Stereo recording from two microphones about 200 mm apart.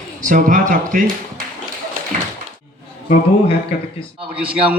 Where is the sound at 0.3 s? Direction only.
40° right (ahead or behind).